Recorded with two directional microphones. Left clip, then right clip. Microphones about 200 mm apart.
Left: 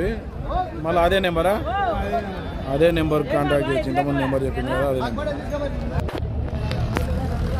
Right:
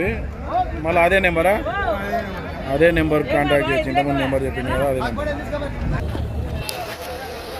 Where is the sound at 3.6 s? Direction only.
45° right (ahead or behind).